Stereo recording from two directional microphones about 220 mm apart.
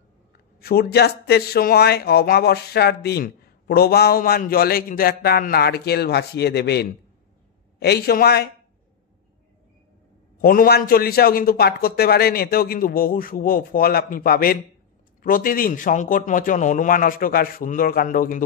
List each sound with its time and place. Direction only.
0.6 s speech: 45° left (ahead or behind)
10.4 s a man's voice: 40° left (ahead or behind)